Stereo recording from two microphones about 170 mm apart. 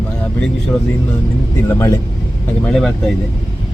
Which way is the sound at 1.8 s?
20° left (ahead or behind).